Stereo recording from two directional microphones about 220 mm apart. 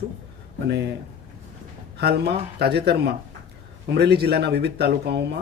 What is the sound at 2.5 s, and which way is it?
Speech, 45° right (ahead or behind).